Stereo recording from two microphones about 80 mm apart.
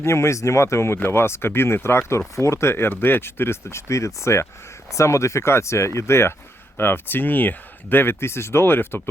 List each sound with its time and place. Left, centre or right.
0.0 s speech: left